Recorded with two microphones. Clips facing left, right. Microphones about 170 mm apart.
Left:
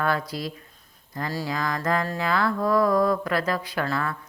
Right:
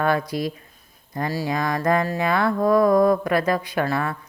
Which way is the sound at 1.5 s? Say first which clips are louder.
Right 5 dB; 20° right (ahead or behind).